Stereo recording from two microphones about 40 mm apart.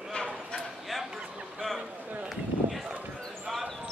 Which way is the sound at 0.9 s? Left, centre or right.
Centre.